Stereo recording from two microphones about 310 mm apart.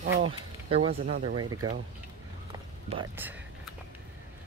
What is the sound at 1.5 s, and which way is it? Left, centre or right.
Speech, right.